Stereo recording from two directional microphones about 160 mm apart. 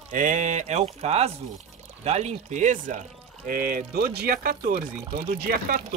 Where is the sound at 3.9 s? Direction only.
75° right (ahead or behind).